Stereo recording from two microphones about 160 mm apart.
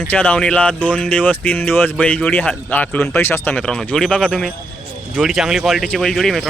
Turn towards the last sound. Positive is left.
turn(degrees=0)  # may be behind; listen again after turning